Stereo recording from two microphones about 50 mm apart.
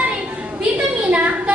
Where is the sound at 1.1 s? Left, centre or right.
Right.